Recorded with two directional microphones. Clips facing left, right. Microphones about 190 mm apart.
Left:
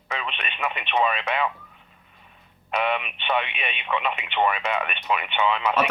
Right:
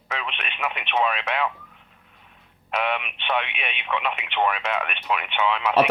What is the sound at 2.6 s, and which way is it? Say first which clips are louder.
Speech: left 1 dB; centre (ahead or behind).